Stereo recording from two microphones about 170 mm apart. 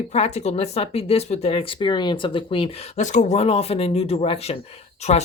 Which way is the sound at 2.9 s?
45° left (ahead or behind).